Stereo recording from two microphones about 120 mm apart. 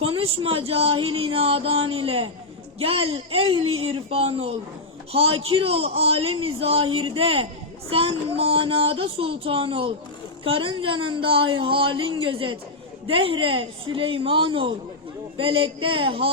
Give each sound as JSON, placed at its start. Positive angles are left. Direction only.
{"t": 0.0, "sound": "speech", "side_deg": -50}